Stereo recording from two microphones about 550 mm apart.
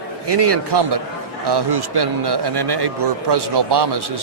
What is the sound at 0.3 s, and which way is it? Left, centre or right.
A man's voice, right.